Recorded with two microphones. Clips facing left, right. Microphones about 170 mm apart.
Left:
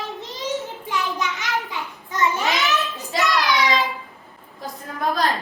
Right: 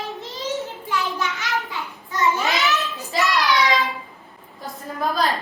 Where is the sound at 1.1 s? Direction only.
20° left (ahead or behind).